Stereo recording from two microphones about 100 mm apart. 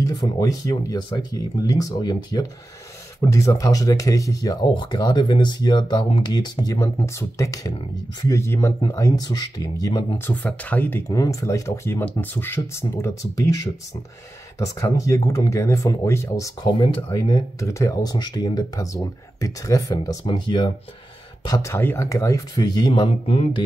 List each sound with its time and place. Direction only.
0.0 s speech: 40° left (ahead or behind)
3.2 s speech: 30° left (ahead or behind)
4.6 s speech: 50° left (ahead or behind)
10.1 s speech: 20° left (ahead or behind)
11.1 s speech: 35° left (ahead or behind)
12.0 s speech: 15° left (ahead or behind); by 20.2 s 35° left (ahead or behind)
20.2 s speech: 50° left (ahead or behind)
21.7 s speech: 25° left (ahead or behind); by 23.0 s 45° left (ahead or behind)
23.0 s speech: 75° left (ahead or behind)